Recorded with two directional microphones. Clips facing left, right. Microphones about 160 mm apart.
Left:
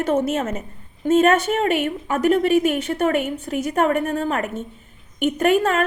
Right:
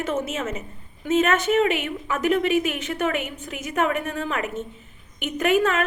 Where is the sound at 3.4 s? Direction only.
35° left (ahead or behind).